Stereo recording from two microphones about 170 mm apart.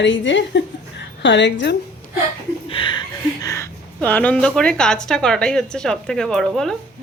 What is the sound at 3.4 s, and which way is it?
Speech, 15° left (ahead or behind).